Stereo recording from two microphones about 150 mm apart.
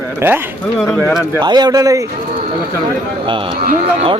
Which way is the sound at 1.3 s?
30° right (ahead or behind).